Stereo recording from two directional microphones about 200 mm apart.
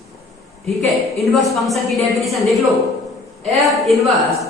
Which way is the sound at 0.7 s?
Centre (ahead or behind).